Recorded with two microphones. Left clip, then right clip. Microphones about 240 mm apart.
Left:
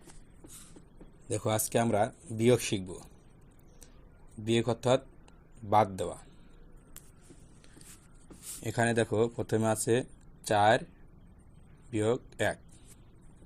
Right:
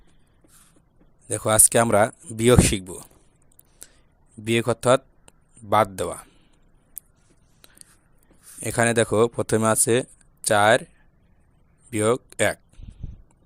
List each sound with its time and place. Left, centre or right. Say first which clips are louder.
1.3 s speech: right 10 dB; right
4.4 s speech: right 8 dB; right
8.6 s speech: right 8 dB; right
11.9 s speech: right 8 dB; right